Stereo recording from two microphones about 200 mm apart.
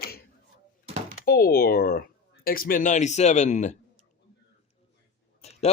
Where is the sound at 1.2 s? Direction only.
50° left (ahead or behind).